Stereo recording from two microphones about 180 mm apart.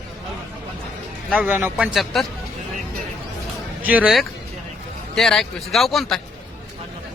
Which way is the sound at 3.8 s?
10° right (ahead or behind).